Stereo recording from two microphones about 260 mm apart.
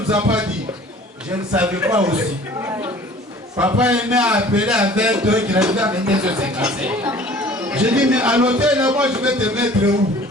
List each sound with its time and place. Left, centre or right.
0.1 s a man's voice: centre
3.6 s a man's voice: centre